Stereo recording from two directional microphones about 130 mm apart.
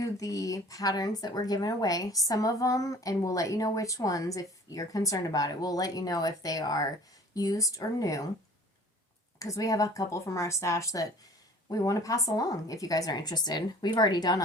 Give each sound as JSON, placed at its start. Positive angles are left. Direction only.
{"t": 0.0, "sound": "speech", "side_deg": 25}
{"t": 9.4, "sound": "speech", "side_deg": 25}